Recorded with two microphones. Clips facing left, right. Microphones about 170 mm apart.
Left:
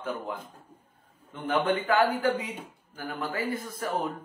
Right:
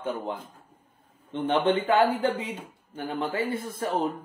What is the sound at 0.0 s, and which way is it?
Speech, 25° right (ahead or behind).